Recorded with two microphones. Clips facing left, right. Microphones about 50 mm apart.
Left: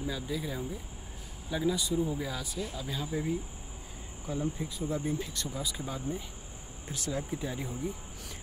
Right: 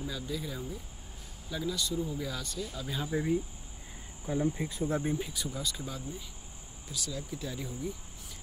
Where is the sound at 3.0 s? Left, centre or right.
Centre.